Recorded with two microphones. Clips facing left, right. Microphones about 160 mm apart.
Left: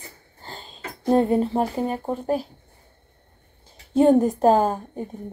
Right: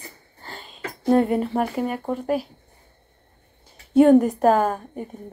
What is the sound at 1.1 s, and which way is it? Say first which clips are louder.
Speech: even; 25° left (ahead or behind).